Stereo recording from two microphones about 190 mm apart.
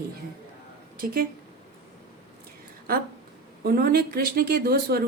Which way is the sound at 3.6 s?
55° right (ahead or behind).